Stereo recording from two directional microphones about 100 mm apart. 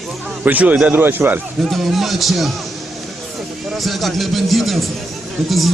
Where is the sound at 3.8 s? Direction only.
Centre (ahead or behind).